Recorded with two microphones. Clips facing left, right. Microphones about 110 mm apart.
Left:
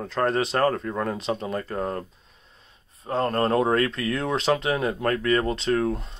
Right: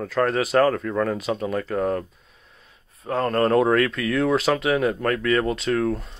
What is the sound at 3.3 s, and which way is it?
Speech, centre (ahead or behind).